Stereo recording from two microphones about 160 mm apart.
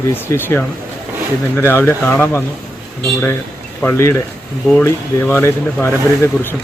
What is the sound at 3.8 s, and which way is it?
Speech, 15° left (ahead or behind).